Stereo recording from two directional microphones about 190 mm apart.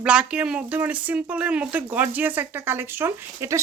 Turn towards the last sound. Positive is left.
turn(degrees=-15)  # may be behind; listen again after turning